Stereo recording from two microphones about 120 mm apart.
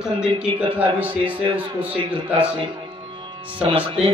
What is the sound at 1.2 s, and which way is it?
A man's voice, 45° right (ahead or behind).